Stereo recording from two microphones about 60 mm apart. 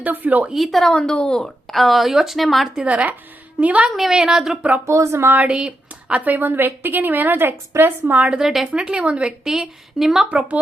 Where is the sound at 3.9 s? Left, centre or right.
Centre.